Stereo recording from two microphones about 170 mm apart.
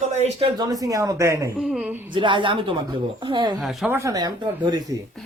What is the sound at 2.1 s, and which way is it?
Speech, 30° right (ahead or behind).